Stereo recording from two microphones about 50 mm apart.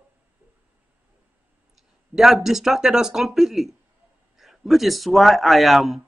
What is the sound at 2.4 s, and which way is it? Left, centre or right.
Speech, centre.